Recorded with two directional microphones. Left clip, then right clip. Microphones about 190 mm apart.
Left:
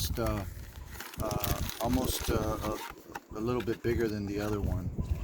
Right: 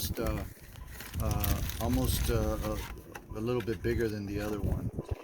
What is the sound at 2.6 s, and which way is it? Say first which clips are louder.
Vehicle: left 2 dB; 45° left (ahead or behind).